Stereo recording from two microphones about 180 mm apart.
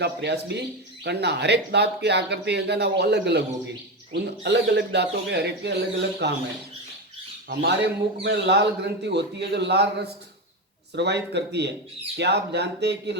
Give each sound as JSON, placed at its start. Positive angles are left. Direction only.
{"t": 0.0, "sound": "speech", "side_deg": -70}
{"t": 7.4, "sound": "speech", "side_deg": -60}